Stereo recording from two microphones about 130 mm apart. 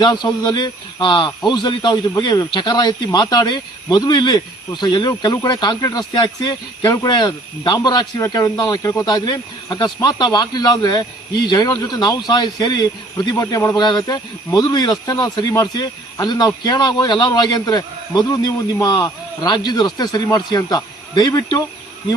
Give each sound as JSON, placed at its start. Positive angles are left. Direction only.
{"t": 0.0, "sound": "speech", "side_deg": 35}